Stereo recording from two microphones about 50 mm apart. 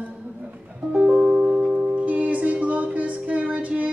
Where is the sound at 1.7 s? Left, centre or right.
Right.